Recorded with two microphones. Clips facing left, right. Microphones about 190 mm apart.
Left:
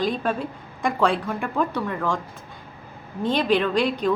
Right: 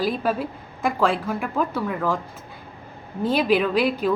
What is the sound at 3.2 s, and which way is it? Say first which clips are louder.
Speech: right 1 dB; 5° right (ahead or behind).